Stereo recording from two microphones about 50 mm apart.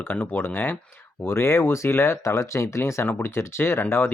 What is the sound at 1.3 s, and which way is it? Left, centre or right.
Speech, left.